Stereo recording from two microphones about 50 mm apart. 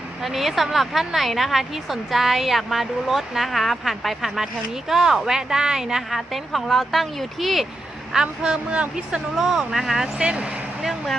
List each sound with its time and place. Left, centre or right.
0.2 s a woman's voice: centre
8.1 s speech: centre
9.3 s speech: centre
10.2 s speech: right